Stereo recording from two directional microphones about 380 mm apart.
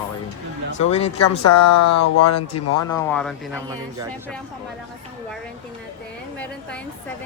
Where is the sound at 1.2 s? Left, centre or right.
Left.